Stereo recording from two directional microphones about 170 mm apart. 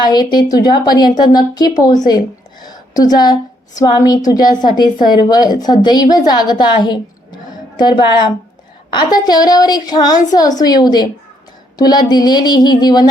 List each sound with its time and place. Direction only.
0.0 s a woman's voice: 25° left (ahead or behind)